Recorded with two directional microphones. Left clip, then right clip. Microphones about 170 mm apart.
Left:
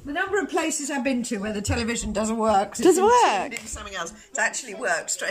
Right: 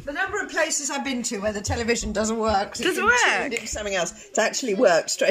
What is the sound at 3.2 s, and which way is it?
Speech, 15° left (ahead or behind).